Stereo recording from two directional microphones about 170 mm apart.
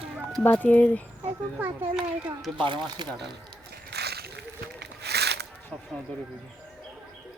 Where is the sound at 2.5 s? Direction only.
30° right (ahead or behind).